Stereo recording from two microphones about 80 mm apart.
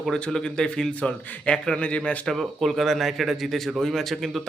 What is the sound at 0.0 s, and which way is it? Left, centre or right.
A man's voice, centre.